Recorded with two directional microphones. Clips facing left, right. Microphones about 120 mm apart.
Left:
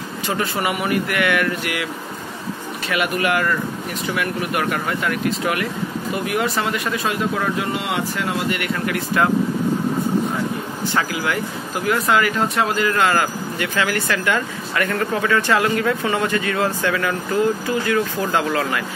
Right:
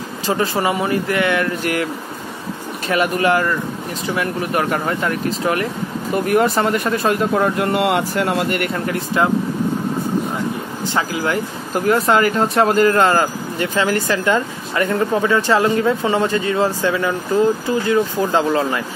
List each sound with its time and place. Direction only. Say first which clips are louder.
0.3 s speech: right 4 dB; 30° right (ahead or behind)
2.9 s speech: right 4 dB; 30° right (ahead or behind)
6.1 s speech: right 7 dB; 45° right (ahead or behind)
8.7 s speech: right 1 dB; 30° right (ahead or behind)
11.7 s speech: right 4 dB; 40° right (ahead or behind)